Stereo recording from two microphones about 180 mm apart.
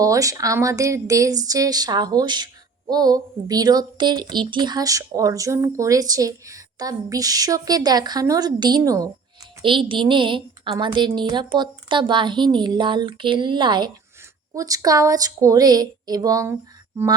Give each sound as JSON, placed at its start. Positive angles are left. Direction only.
{"t": 0.0, "sound": "a woman's voice", "side_deg": -20}